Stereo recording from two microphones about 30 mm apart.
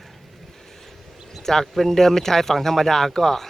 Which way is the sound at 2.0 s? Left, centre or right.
Centre.